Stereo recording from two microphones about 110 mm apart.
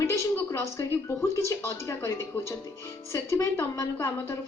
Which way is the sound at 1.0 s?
25° left (ahead or behind).